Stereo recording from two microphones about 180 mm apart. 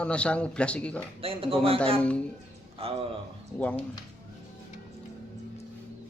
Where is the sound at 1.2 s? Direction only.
30° right (ahead or behind).